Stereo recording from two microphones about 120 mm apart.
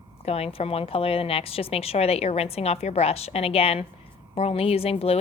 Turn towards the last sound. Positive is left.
turn(degrees=55)  # may be behind; listen again after turning